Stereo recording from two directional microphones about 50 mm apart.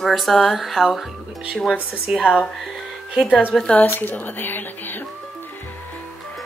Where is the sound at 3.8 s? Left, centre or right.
Left.